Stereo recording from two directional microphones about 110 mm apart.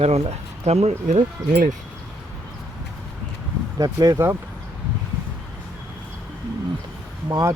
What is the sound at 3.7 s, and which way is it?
Speech, 35° right (ahead or behind).